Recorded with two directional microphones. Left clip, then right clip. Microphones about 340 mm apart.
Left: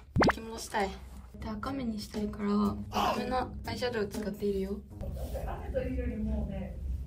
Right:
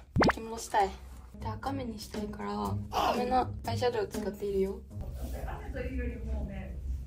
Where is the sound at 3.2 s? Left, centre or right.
Centre.